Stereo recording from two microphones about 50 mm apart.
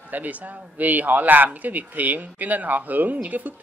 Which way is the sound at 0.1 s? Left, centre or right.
Right.